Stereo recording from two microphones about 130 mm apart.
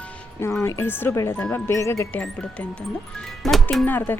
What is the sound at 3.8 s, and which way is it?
Speech, 15° left (ahead or behind).